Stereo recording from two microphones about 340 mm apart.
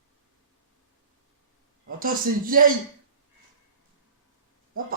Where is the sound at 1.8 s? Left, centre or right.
Right.